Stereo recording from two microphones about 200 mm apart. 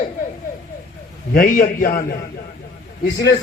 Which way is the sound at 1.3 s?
45° left (ahead or behind).